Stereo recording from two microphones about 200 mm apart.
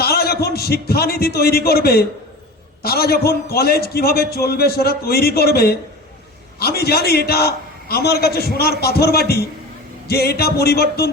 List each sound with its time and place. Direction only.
0.0 s a man's voice: 50° left (ahead or behind)